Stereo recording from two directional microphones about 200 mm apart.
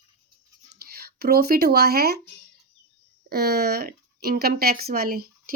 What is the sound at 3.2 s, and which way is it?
Speech, 50° right (ahead or behind).